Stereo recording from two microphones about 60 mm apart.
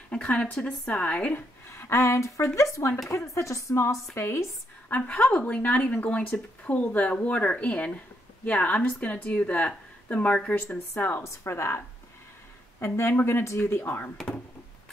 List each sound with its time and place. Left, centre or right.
0.1 s speech: left
1.3 s a woman's voice: left
4.9 s speech: left
11.2 s a woman's voice: left
12.8 s a woman's voice: left